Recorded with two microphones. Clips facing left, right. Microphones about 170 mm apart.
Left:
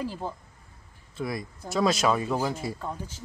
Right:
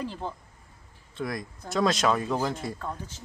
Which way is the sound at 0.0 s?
10° left (ahead or behind).